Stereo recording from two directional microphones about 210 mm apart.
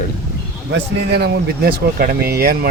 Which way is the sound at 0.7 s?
50° right (ahead or behind).